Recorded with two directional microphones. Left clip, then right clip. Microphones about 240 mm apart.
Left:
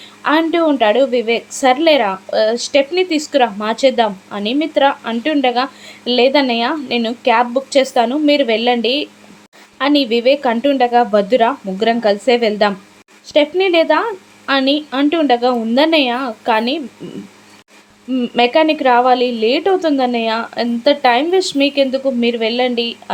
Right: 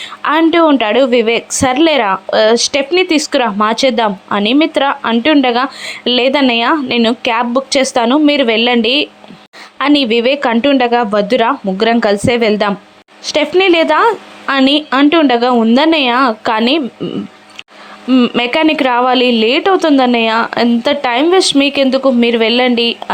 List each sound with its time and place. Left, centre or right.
0.0 s a woman's voice: centre
18.1 s speech: centre